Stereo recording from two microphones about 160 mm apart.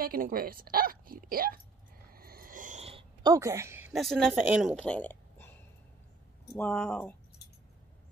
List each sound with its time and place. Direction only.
0.0 s speech: 65° right (ahead or behind)
2.1 s cricket: 65° right (ahead or behind)
2.8 s a sound: 35° right (ahead or behind); by 3.9 s 15° right (ahead or behind)
3.9 s a woman's voice: centre (ahead or behind)
4.7 s a sound: 5° left (ahead or behind)
6.6 s speech: 10° left (ahead or behind)